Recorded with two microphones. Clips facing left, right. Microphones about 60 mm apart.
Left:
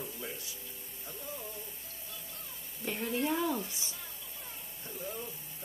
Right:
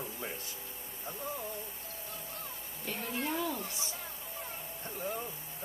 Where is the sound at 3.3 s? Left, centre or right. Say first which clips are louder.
Left 2 dB; left.